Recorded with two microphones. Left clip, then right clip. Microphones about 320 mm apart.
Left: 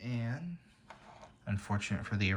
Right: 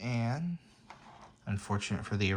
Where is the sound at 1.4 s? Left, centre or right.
Centre.